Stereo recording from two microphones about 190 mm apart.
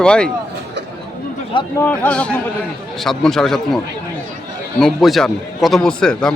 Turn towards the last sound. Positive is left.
turn(degrees=5)  # may be behind; listen again after turning